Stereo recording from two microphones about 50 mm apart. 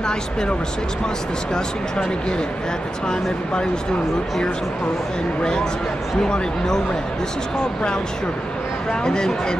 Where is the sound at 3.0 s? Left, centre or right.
Centre.